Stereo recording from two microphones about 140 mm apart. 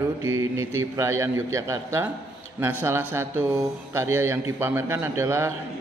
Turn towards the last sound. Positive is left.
turn(degrees=-15)  # may be behind; listen again after turning